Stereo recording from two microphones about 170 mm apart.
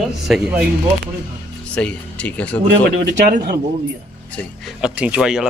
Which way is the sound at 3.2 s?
55° right (ahead or behind).